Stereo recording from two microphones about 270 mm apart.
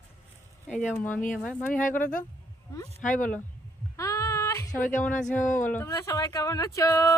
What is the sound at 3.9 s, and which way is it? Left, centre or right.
Female singing, centre.